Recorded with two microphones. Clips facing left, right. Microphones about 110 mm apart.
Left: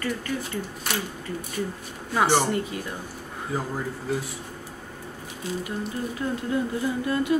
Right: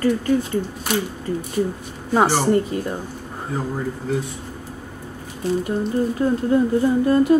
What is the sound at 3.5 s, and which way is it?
Speech, 5° left (ahead or behind).